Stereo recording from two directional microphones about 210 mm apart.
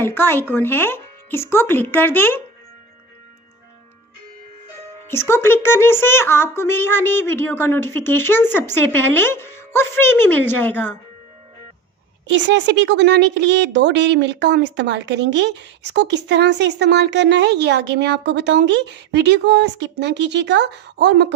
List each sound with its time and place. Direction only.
0.0 s speech: 10° left (ahead or behind)
5.0 s speech: 10° left (ahead or behind)
12.3 s a woman's voice: 60° right (ahead or behind)